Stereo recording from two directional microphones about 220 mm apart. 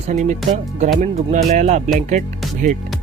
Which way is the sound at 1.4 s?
30° right (ahead or behind).